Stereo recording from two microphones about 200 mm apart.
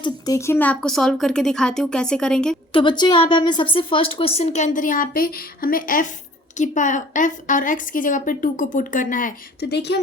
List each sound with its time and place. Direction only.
0.0 s speech: 15° left (ahead or behind)
2.7 s a woman's voice: 20° left (ahead or behind); by 10.0 s 55° left (ahead or behind)